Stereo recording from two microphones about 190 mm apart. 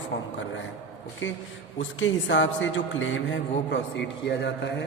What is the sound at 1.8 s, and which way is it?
A man's voice, 75° left (ahead or behind).